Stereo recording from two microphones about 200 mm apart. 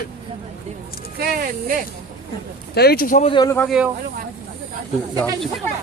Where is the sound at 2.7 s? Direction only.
50° left (ahead or behind).